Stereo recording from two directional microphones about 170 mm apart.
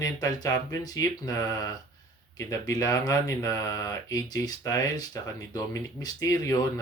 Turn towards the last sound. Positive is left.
turn(degrees=20)  # may be behind; listen again after turning